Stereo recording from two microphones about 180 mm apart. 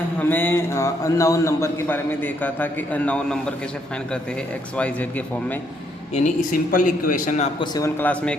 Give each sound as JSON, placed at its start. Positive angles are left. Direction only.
{"t": 0.2, "sound": "a man's voice", "side_deg": 10}
{"t": 4.8, "sound": "a man's voice", "side_deg": 10}
{"t": 6.1, "sound": "a man's voice", "side_deg": 45}
{"t": 7.6, "sound": "a man's voice", "side_deg": 20}